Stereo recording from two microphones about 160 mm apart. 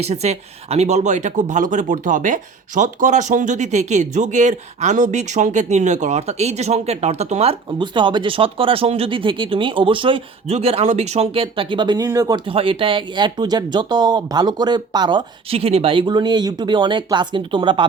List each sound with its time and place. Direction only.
0.0 s speech: 40° right (ahead or behind); by 12.4 s 20° right (ahead or behind)
12.5 s speech: 35° right (ahead or behind)